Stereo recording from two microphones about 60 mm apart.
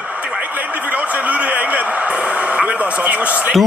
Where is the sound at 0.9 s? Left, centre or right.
Right.